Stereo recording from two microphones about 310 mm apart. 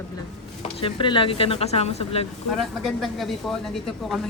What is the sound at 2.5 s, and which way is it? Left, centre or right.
Speech, centre.